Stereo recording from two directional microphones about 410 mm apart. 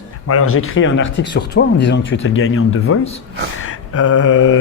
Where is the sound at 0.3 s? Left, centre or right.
Left.